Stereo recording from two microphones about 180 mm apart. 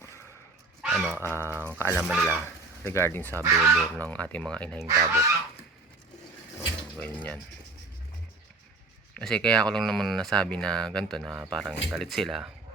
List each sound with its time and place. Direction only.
0.8 s a sound: 5° right (ahead or behind)
1.3 s speech: 15° left (ahead or behind)
2.0 s speech: 5° right (ahead or behind)
2.8 s speech: 15° left (ahead or behind)
4.9 s fowl: 15° right (ahead or behind)
7.0 s speech: 10° left (ahead or behind)
9.1 s speech: 5° left (ahead or behind)